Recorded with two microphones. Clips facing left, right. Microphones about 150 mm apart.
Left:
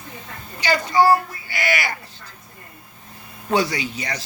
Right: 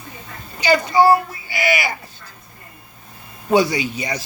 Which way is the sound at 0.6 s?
15° right (ahead or behind).